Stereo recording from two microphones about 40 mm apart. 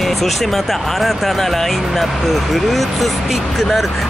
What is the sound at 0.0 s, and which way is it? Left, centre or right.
Speech, centre.